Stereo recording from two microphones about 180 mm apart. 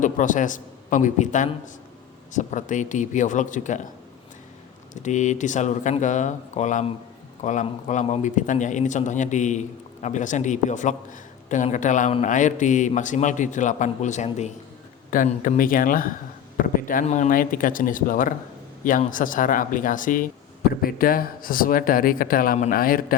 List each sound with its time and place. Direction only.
0.0 s a man's voice: 45° left (ahead or behind)
5.0 s a man's voice: 40° left (ahead or behind)